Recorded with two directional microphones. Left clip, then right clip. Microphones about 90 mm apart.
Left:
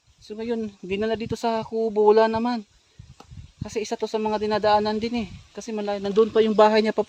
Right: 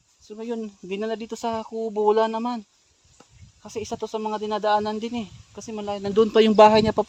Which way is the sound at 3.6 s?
15° left (ahead or behind).